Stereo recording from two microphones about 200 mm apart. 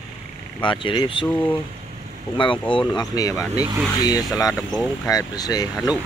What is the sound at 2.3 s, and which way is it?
Speech, 25° left (ahead or behind).